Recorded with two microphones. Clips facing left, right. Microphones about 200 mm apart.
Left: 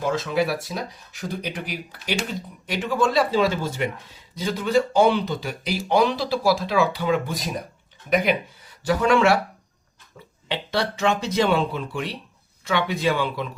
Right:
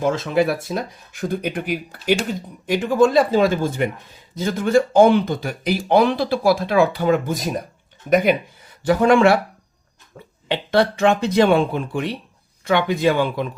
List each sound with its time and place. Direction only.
0.0 s speech: 50° right (ahead or behind)
8.8 s speech: 55° right (ahead or behind)
10.2 s a sound: 55° right (ahead or behind)
10.5 s speech: 55° right (ahead or behind)